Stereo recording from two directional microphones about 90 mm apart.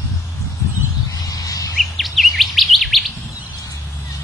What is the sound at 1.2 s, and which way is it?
Bird, 40° left (ahead or behind).